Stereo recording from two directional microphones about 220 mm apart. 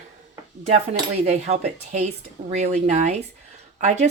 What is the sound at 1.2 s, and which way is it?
Speech, 30° right (ahead or behind).